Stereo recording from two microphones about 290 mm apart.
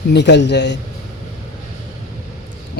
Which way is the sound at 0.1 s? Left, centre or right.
Left.